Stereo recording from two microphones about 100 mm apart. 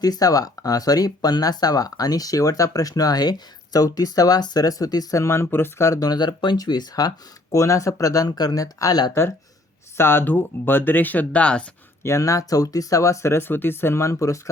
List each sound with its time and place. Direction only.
0.0 s speech: 40° left (ahead or behind)
10.0 s speech: 20° left (ahead or behind)
12.0 s speech: 30° left (ahead or behind)